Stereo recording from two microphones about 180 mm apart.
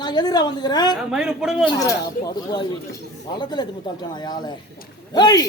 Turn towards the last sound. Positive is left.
turn(degrees=20)  # may be behind; listen again after turning